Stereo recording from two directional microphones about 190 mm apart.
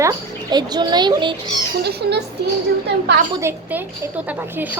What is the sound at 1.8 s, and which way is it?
A woman's voice, 60° right (ahead or behind).